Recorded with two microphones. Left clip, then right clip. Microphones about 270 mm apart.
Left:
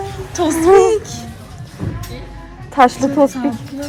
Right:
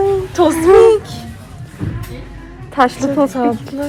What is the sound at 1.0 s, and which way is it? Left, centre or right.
Music, centre.